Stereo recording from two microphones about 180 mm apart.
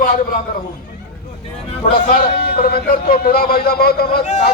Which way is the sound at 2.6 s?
55° left (ahead or behind).